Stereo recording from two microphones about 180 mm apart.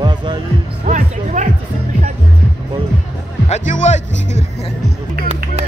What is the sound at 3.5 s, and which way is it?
Music, 40° left (ahead or behind).